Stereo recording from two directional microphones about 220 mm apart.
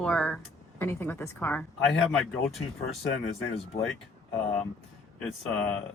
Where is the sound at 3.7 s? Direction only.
50° left (ahead or behind).